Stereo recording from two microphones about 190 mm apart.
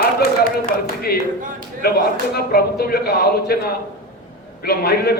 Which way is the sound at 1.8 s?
55° left (ahead or behind).